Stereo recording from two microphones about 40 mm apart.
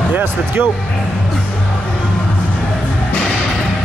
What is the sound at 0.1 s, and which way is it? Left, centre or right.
Speech, right.